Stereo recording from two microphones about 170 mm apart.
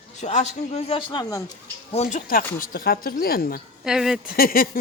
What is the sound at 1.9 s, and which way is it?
A man's voice, 45° left (ahead or behind).